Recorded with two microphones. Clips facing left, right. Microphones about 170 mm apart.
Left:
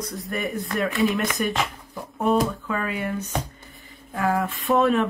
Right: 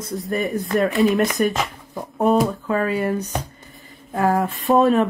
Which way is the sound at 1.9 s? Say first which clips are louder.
Right 4 dB; 40° right (ahead or behind).